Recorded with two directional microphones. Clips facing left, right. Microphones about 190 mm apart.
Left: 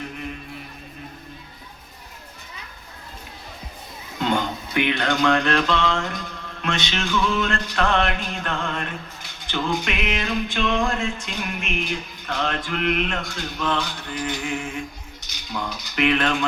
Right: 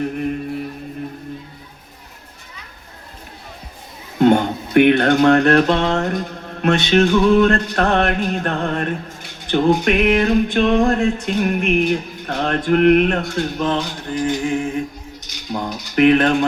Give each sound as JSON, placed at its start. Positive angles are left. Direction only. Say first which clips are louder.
{"t": 0.0, "sound": "music", "louder": "right 11 dB", "side_deg": -50}
{"t": 4.2, "sound": "mantra", "louder": "right 10 dB", "side_deg": -55}
{"t": 15.5, "sound": "speech", "louder": "right 8 dB", "side_deg": -45}